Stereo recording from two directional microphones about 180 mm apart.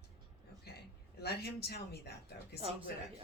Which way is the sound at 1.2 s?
60° left (ahead or behind).